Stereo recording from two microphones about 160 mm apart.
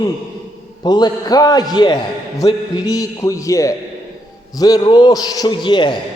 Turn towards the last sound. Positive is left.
turn(degrees=30)  # may be behind; listen again after turning